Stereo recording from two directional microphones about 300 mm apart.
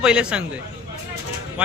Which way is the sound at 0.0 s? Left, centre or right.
Centre.